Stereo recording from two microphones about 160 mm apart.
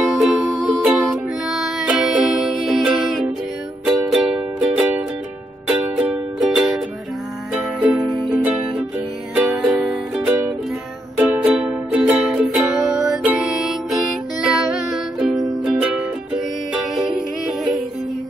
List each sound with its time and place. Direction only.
0.0 s music: centre (ahead or behind)
8.3 s music: 10° right (ahead or behind)